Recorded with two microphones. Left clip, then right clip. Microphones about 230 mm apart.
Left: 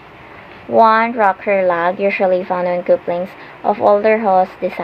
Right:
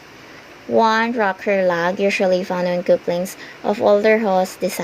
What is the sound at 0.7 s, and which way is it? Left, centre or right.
Speech, right.